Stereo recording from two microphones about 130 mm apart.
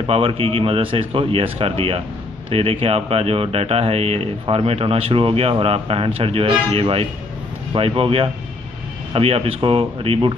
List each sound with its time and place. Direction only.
0.0 s speech: 45° right (ahead or behind)